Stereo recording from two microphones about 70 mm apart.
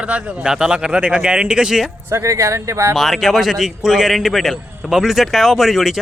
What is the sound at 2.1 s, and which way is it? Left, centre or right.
Speech, right.